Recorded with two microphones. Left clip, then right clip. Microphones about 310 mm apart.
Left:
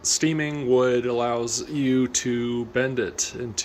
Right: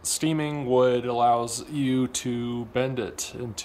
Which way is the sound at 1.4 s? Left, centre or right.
Right.